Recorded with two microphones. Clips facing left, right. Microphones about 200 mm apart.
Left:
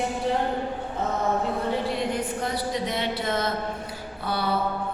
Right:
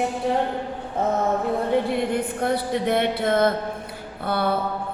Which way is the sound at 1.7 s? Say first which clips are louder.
Right 5 dB; 55° right (ahead or behind).